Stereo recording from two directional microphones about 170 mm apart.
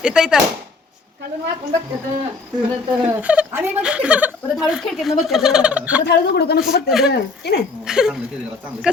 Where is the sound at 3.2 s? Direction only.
10° right (ahead or behind).